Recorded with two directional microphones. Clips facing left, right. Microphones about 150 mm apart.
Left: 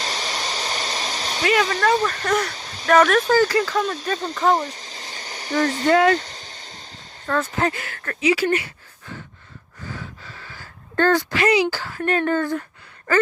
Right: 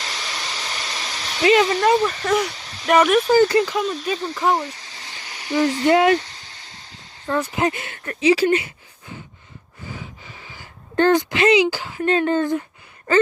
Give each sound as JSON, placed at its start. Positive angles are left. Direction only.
{"t": 0.0, "sound": "a sound", "side_deg": 45}
{"t": 1.5, "sound": "speech", "side_deg": -25}
{"t": 2.0, "sound": "speech", "side_deg": -5}
{"t": 3.4, "sound": "speech", "side_deg": -25}
{"t": 3.8, "sound": "speech", "side_deg": -5}
{"t": 4.6, "sound": "a sound", "side_deg": 45}
{"t": 5.8, "sound": "speech", "side_deg": -20}
{"t": 6.4, "sound": "a sound", "side_deg": 20}
{"t": 7.3, "sound": "speech", "side_deg": -15}
{"t": 8.4, "sound": "speech", "side_deg": -20}
{"t": 9.9, "sound": "speech", "side_deg": -15}